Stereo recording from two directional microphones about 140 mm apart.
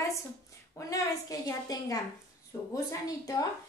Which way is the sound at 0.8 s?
25° left (ahead or behind).